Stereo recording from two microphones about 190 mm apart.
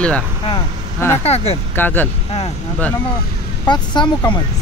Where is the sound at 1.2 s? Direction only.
35° left (ahead or behind).